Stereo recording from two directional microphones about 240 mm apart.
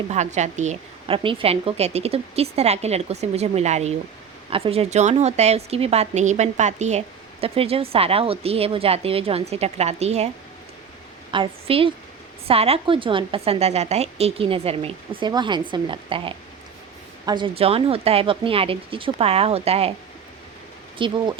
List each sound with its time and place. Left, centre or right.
0.1 s a woman's voice: right
11.3 s a woman's voice: right
21.0 s a woman's voice: right